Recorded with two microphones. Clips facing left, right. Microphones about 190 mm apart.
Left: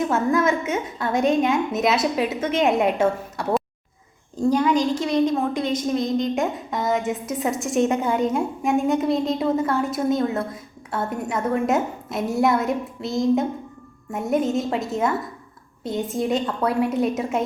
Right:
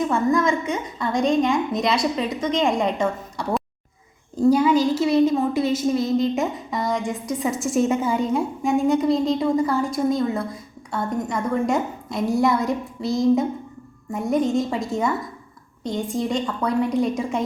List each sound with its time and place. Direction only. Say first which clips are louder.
0.1 s a woman's voice: even; 5° left (ahead or behind)
4.4 s a woman's voice: right 2 dB; 5° right (ahead or behind)